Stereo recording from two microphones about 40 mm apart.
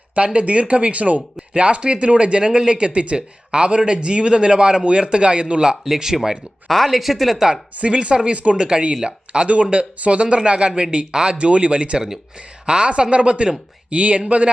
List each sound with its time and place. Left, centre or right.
0.3 s speech: right
5.8 s speech: centre
6.7 s speech: centre
7.8 s speech: right
11.1 s speech: centre
11.3 s speech: right